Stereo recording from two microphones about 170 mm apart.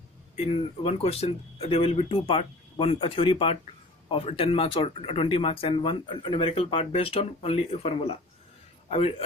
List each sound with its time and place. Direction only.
0.3 s speech: 35° left (ahead or behind)